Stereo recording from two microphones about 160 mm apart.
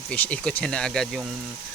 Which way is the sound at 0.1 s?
5° left (ahead or behind).